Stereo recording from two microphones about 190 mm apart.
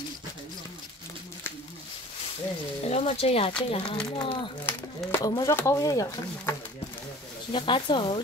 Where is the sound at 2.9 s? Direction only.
35° left (ahead or behind).